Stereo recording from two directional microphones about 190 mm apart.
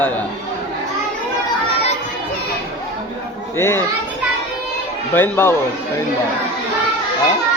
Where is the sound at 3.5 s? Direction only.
10° left (ahead or behind).